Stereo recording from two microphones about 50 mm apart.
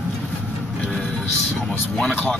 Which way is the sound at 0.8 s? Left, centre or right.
Centre.